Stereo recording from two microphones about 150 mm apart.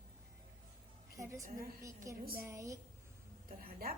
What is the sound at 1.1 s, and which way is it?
A woman's voice, 20° right (ahead or behind).